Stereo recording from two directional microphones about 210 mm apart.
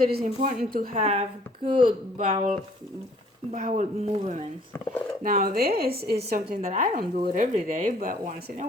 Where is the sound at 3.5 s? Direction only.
35° right (ahead or behind).